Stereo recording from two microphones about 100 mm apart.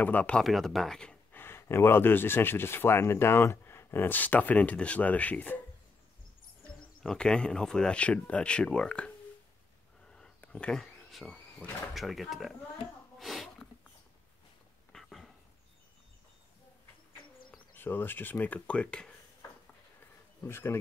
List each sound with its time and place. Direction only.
0.0 s speech: 15° left (ahead or behind)
0.4 s speech: centre (ahead or behind)
1.3 s speech: 25° left (ahead or behind)
7.0 s speech: 10° left (ahead or behind)
10.0 s a sound: 10° left (ahead or behind)
11.9 s speech: centre (ahead or behind)
14.9 s dog: 5° left (ahead or behind)
17.7 s speech: 20° left (ahead or behind)
20.4 s speech: 25° left (ahead or behind)